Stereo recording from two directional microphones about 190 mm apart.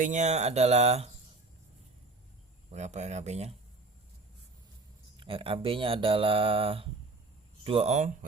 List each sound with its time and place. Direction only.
0.0 s speech: 40° right (ahead or behind)
2.6 s speech: 35° right (ahead or behind)
5.1 s speech: 25° right (ahead or behind)